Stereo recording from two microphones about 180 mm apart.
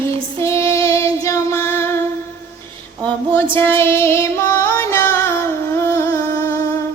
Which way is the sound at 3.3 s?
15° left (ahead or behind).